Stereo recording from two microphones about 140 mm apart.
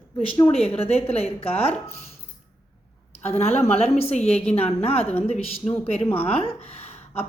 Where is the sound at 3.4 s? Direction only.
50° left (ahead or behind).